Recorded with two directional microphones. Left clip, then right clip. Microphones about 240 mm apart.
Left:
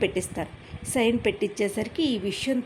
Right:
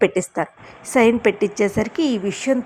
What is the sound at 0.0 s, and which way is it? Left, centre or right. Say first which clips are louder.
A woman's voice: right 8 dB; centre.